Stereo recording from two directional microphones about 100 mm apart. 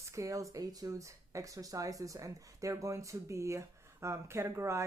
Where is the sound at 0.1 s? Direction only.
30° right (ahead or behind).